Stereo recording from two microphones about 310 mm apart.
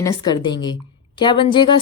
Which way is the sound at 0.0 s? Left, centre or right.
Centre.